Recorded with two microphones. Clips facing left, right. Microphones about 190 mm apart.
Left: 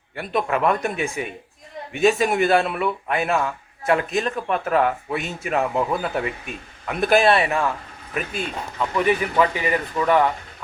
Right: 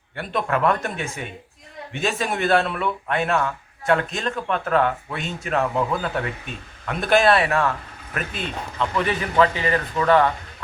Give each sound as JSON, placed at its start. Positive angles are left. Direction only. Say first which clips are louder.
{"t": 0.2, "sound": "a man's voice", "louder": "left 1 dB", "side_deg": 5}